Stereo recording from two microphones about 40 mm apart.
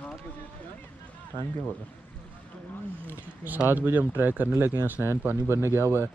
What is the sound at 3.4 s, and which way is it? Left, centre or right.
Speech, right.